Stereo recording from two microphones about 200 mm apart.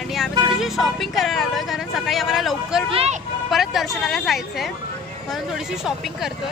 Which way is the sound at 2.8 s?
30° right (ahead or behind).